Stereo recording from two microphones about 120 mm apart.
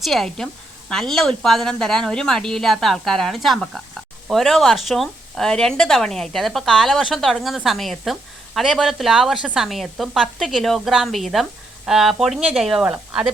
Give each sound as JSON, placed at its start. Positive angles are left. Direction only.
{"t": 0.0, "sound": "speech", "side_deg": 0}